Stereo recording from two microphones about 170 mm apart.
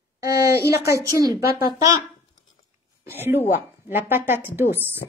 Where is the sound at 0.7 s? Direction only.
15° right (ahead or behind).